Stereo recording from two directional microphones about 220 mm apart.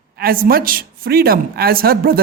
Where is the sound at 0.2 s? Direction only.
40° right (ahead or behind).